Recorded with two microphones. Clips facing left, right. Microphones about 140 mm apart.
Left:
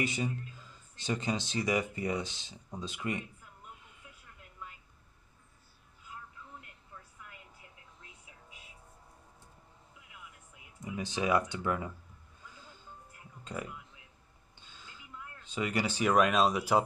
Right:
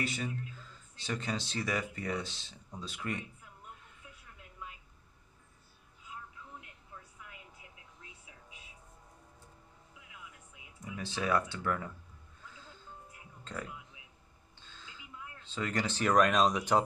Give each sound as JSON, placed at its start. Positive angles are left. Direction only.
{"t": 0.0, "sound": "speech", "side_deg": 20}
{"t": 10.8, "sound": "speech", "side_deg": 20}
{"t": 13.4, "sound": "speech", "side_deg": 15}
{"t": 14.6, "sound": "a sound", "side_deg": 15}
{"t": 15.4, "sound": "speech", "side_deg": 15}